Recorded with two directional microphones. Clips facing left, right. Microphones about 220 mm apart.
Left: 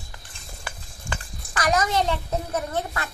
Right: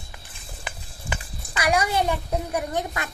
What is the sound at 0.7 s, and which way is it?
A child's voice, 20° right (ahead or behind).